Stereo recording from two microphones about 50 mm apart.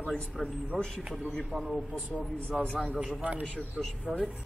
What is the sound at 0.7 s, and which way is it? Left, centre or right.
Speech, right.